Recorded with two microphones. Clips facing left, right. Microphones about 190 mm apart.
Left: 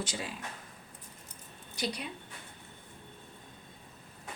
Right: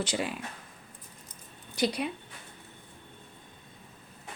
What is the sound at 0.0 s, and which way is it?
Speech, 65° right (ahead or behind).